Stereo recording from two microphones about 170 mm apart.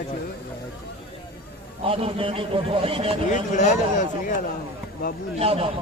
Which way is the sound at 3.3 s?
45° left (ahead or behind).